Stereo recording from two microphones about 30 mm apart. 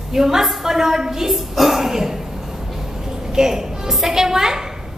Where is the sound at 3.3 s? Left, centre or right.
Centre.